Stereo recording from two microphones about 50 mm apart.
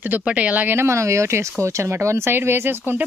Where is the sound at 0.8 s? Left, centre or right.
Right.